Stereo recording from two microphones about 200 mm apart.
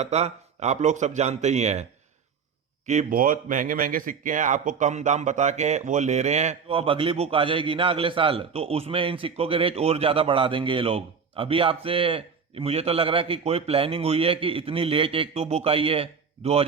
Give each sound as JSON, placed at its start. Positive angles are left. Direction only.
{"t": 0.0, "sound": "a man's voice", "side_deg": -35}